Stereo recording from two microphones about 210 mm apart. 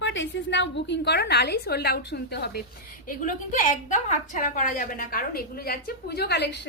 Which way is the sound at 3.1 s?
40° left (ahead or behind).